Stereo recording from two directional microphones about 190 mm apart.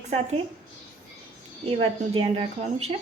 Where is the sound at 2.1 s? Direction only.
30° right (ahead or behind).